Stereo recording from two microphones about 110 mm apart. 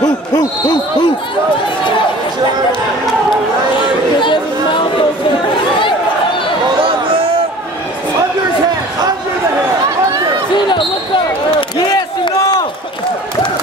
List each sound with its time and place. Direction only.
0.0 s speech: 35° left (ahead or behind)
4.2 s chatter: 45° left (ahead or behind)
6.8 s a sound: 55° right (ahead or behind)
11.9 s crowd: 40° left (ahead or behind)